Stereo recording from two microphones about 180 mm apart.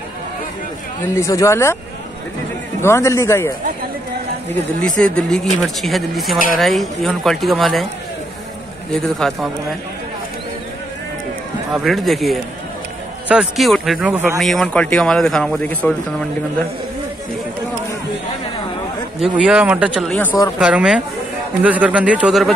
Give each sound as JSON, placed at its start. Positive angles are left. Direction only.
{"t": 1.0, "sound": "speech", "side_deg": 15}
{"t": 2.8, "sound": "speech", "side_deg": 15}
{"t": 4.5, "sound": "speech", "side_deg": 5}
{"t": 8.9, "sound": "speech", "side_deg": 0}
{"t": 11.7, "sound": "speech", "side_deg": 0}
{"t": 14.4, "sound": "speech", "side_deg": 0}
{"t": 19.2, "sound": "speech", "side_deg": -5}
{"t": 19.9, "sound": "speech", "side_deg": 5}
{"t": 20.5, "sound": "speech", "side_deg": -5}